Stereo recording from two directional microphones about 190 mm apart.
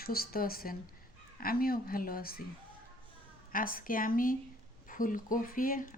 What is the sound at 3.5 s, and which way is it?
Speech, 50° left (ahead or behind).